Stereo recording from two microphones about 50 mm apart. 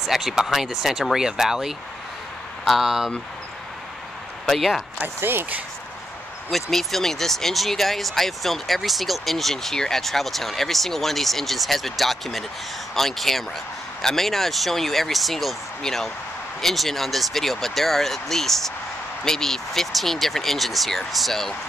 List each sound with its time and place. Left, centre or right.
0.0 s speech: centre
2.6 s speech: centre
4.6 s speech: centre
5.0 s speech: right
6.5 s speech: centre